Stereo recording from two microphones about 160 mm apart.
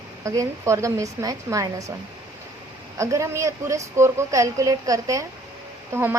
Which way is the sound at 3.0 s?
20° right (ahead or behind).